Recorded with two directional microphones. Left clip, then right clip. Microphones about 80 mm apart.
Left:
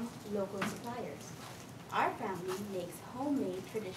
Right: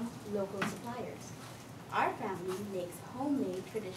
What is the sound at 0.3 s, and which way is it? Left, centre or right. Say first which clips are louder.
Speech: right 1 dB; centre.